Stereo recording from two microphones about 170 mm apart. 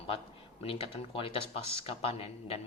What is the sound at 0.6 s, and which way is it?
Speech, 35° left (ahead or behind).